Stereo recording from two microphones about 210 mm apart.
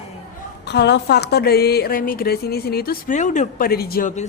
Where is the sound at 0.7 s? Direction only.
55° left (ahead or behind).